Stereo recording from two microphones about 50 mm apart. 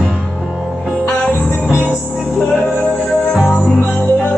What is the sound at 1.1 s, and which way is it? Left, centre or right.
Music, left.